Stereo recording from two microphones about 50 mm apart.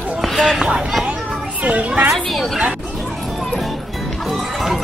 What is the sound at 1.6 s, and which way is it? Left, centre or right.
Children playing, right.